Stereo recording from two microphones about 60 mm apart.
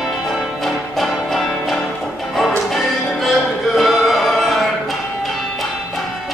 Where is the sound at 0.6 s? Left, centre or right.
Centre.